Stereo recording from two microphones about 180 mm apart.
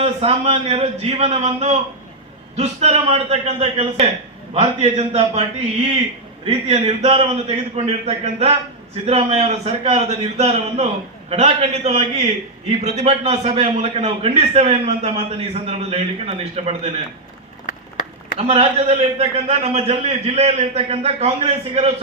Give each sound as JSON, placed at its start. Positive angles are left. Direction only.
{"t": 0.0, "sound": "a man's voice", "side_deg": -35}
{"t": 18.3, "sound": "a man's voice", "side_deg": -35}